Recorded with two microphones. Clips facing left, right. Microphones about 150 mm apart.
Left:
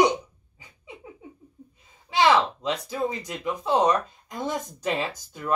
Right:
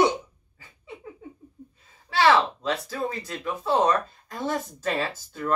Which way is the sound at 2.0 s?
15° left (ahead or behind).